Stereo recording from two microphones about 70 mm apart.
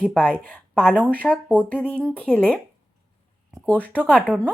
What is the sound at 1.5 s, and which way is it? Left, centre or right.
Speech, right.